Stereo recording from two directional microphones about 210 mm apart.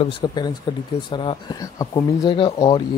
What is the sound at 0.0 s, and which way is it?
Speech, 20° left (ahead or behind).